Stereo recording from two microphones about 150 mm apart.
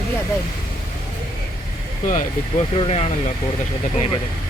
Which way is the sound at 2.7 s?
40° left (ahead or behind).